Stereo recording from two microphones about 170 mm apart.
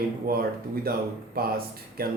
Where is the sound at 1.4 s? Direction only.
60° right (ahead or behind).